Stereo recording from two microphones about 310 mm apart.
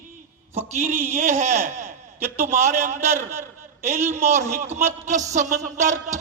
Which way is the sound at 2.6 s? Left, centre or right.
Right.